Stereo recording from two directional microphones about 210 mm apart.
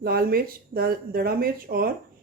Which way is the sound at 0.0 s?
45° right (ahead or behind).